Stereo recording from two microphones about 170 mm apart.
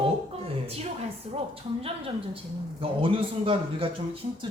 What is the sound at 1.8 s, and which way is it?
Speech, 35° right (ahead or behind).